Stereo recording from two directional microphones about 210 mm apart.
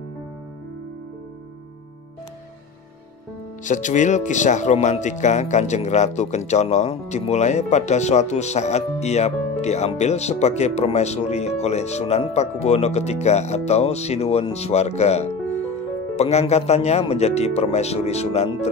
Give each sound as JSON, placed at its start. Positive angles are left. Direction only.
{"t": 3.6, "sound": "speech", "side_deg": 35}